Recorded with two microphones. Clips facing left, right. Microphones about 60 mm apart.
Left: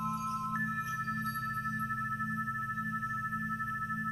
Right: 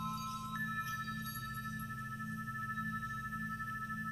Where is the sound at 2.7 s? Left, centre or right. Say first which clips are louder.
Left 5 dB; left.